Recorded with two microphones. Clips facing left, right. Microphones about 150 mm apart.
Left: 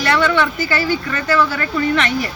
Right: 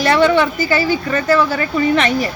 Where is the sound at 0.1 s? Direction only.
15° right (ahead or behind).